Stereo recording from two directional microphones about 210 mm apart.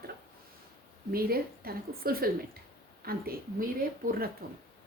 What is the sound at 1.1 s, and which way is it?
A woman's voice, 45° right (ahead or behind).